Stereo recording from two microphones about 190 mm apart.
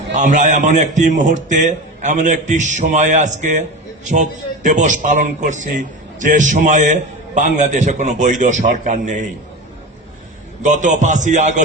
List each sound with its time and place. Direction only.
0.1 s a man's voice: 40° right (ahead or behind)
10.6 s a man's voice: 40° right (ahead or behind)